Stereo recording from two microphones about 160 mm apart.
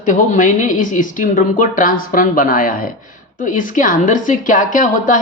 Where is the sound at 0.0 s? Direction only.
50° left (ahead or behind).